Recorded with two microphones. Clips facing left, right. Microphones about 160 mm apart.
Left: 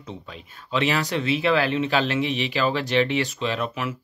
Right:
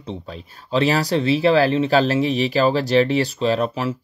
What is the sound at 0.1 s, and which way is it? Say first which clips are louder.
Speech: right 6 dB; 35° right (ahead or behind).